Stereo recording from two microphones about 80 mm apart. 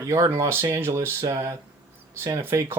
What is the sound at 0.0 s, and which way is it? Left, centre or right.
Speech, right.